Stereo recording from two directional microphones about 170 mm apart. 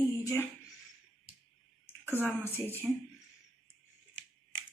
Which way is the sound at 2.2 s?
10° left (ahead or behind).